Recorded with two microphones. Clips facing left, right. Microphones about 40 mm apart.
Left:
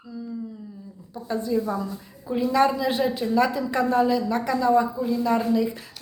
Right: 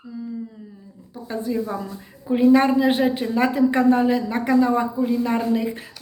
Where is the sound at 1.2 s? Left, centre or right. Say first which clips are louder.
Even; right.